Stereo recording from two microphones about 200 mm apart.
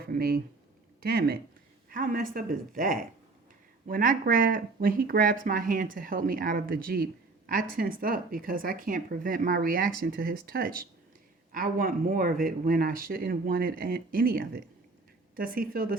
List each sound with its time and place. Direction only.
0.0 s speech: 50° right (ahead or behind)